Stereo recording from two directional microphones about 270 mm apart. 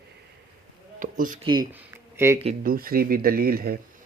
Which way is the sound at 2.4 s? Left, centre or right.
Right.